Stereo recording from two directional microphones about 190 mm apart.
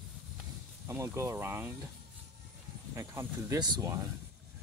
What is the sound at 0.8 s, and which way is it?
Speech, 15° right (ahead or behind).